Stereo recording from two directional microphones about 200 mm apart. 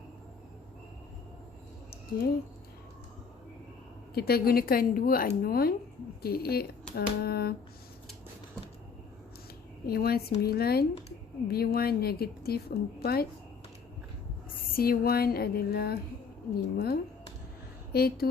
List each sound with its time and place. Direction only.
4.1 s speech: 50° left (ahead or behind)
9.8 s speech: 50° left (ahead or behind)
14.8 s speech: 50° left (ahead or behind)